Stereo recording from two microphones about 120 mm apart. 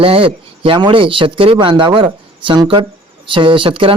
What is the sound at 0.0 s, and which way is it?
Speech, 50° right (ahead or behind).